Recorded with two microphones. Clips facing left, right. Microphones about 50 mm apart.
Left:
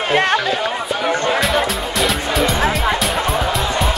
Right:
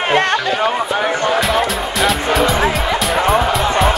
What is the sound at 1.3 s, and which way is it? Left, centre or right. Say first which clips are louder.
Music: right 2 dB; centre.